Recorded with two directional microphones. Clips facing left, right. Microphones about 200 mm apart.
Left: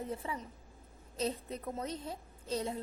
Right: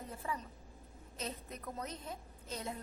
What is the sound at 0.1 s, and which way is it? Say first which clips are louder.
A woman's voice: left 3 dB; 20° left (ahead or behind).